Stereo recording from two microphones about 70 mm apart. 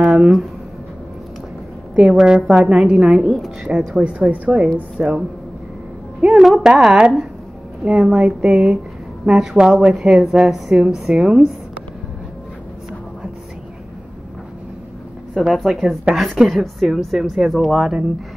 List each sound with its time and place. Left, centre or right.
0.0 s speech: centre
2.1 s a woman's voice: centre
4.0 s a woman's voice: centre
6.2 s a woman's voice: centre
15.3 s speech: centre